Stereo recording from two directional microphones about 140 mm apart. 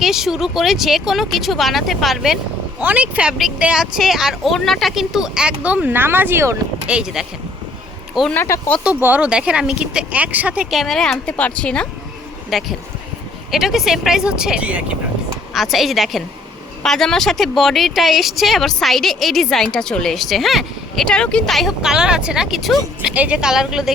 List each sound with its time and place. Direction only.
0.0 s speech: 5° right (ahead or behind)
6.8 s speech: 5° right (ahead or behind)
8.3 s speech: 15° left (ahead or behind)
8.8 s speech: 10° right (ahead or behind)